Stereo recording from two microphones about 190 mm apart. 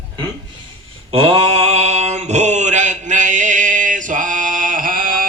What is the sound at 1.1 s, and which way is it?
Mantra, 30° right (ahead or behind).